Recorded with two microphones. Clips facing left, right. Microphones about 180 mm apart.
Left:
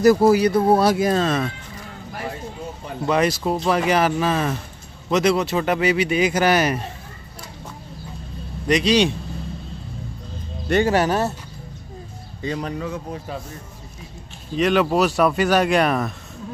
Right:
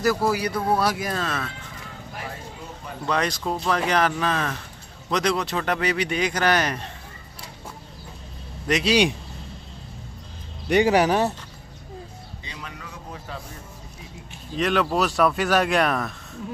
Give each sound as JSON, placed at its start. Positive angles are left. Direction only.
{"t": 0.0, "sound": "speech", "side_deg": 20}
{"t": 3.1, "sound": "speech", "side_deg": 5}
{"t": 8.6, "sound": "speech", "side_deg": -5}
{"t": 10.7, "sound": "speech", "side_deg": -15}
{"t": 12.4, "sound": "speech", "side_deg": 45}
{"t": 14.6, "sound": "speech", "side_deg": 0}